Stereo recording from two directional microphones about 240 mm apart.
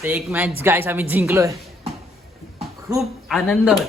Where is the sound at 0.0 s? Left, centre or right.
Centre.